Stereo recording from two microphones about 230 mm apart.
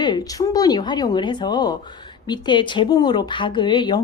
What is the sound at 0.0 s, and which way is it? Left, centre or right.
A woman's voice, centre.